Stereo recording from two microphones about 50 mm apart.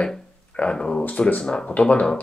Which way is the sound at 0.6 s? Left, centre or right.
Centre.